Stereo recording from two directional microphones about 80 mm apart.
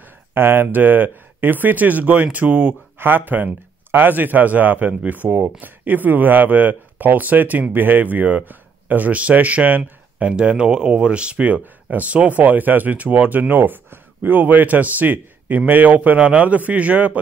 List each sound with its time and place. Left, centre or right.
0.3 s speech: right